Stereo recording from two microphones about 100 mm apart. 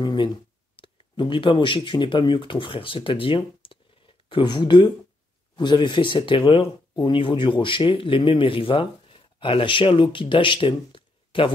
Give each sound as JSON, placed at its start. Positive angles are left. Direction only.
{"t": 0.0, "sound": "speech", "side_deg": 45}